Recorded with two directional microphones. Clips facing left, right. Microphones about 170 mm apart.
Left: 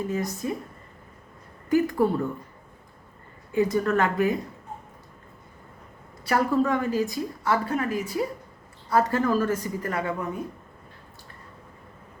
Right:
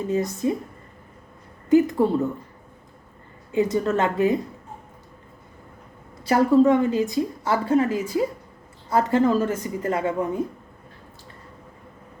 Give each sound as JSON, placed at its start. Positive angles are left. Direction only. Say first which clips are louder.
{"t": 0.1, "sound": "a woman's voice", "louder": "right 6 dB", "side_deg": -25}
{"t": 1.7, "sound": "a sound", "louder": "right 4 dB", "side_deg": -20}
{"t": 3.5, "sound": "a woman's voice", "louder": "right 1 dB", "side_deg": -20}
{"t": 6.2, "sound": "a woman's voice", "louder": "right 6 dB", "side_deg": -25}